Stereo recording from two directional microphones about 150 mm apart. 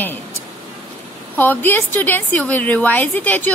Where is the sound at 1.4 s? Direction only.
10° left (ahead or behind).